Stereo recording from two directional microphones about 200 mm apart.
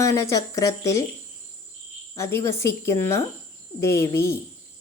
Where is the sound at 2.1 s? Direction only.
15° left (ahead or behind).